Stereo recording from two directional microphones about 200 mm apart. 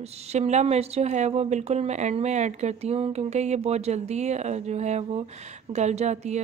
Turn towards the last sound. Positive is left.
turn(degrees=-35)  # may be behind; listen again after turning